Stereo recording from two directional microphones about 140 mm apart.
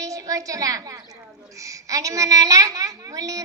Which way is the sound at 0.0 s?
25° right (ahead or behind).